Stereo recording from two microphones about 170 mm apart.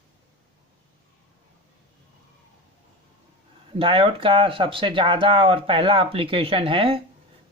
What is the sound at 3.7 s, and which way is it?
Speech, 30° right (ahead or behind).